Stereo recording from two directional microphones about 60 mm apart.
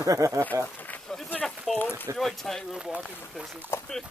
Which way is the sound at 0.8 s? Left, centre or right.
Left.